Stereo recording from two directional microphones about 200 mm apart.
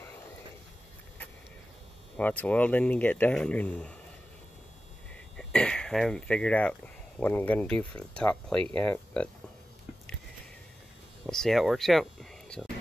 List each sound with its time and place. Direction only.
2.1 s speech: 5° left (ahead or behind)
5.1 s speech: 5° left (ahead or behind)
11.2 s speech: centre (ahead or behind)